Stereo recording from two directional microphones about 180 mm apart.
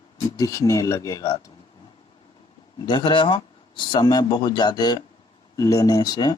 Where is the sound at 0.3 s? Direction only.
20° left (ahead or behind).